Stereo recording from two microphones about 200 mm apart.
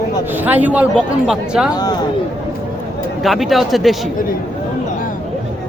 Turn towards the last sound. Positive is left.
turn(degrees=0)  # may be behind; listen again after turning